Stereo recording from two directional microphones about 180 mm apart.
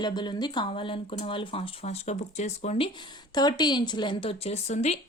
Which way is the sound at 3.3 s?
25° left (ahead or behind).